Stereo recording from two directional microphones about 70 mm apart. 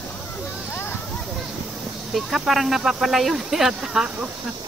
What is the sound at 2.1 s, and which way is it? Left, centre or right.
Speech, centre.